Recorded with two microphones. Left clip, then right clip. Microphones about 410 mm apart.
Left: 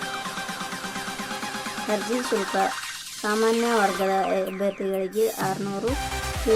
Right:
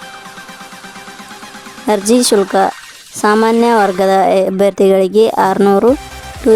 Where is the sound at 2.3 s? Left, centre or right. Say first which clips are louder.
Right 12 dB; right.